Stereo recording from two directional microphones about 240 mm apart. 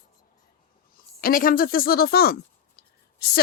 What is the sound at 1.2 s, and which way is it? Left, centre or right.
Speech, left.